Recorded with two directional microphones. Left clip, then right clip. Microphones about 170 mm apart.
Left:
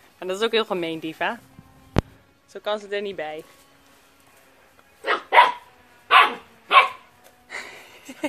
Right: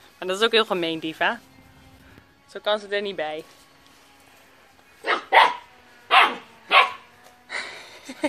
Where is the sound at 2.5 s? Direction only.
10° left (ahead or behind).